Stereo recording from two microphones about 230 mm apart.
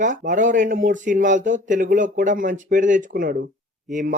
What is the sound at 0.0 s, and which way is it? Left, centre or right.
Speech, right.